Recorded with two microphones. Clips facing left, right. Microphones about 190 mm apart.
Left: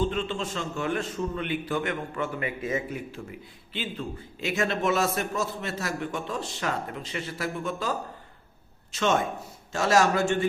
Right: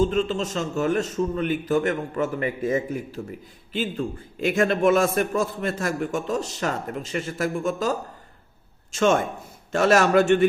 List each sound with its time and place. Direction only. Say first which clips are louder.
0.0 s a man's voice: right 6 dB; 45° right (ahead or behind)
9.7 s a man's voice: right 5 dB; 60° right (ahead or behind)